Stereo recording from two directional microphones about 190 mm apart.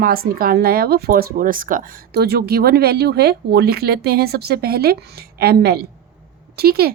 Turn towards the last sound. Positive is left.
turn(degrees=-55)  # may be behind; listen again after turning